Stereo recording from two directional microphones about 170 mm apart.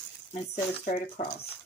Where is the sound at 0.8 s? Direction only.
50° left (ahead or behind).